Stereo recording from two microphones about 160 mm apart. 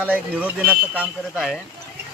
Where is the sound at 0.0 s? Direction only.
10° right (ahead or behind).